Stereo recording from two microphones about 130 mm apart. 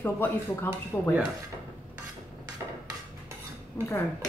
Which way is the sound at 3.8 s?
10° left (ahead or behind).